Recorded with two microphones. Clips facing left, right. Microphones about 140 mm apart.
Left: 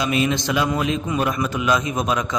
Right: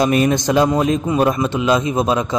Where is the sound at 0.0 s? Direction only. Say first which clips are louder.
Right 6 dB; 45° right (ahead or behind).